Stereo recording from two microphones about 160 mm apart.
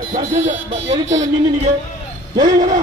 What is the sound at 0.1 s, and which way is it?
A man's voice, 45° right (ahead or behind).